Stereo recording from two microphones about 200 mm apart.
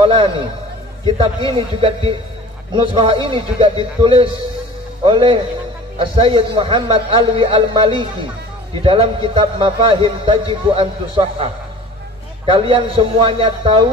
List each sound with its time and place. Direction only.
0.0 s a man's voice: 25° right (ahead or behind)